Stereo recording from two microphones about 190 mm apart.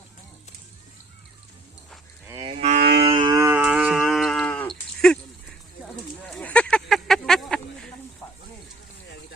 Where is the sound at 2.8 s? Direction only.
60° right (ahead or behind).